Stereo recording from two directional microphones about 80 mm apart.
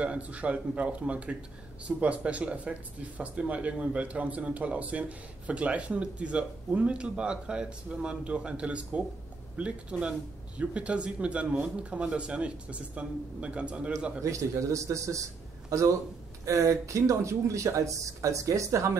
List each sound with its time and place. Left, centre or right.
0.0 s speech: centre
14.2 s speech: right